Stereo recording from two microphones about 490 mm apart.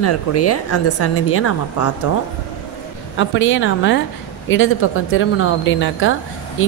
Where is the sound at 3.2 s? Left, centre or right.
Left.